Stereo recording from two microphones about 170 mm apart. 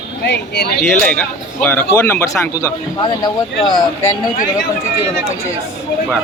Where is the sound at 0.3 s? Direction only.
80° left.